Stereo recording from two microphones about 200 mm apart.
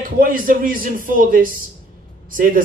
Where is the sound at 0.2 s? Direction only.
45° right (ahead or behind).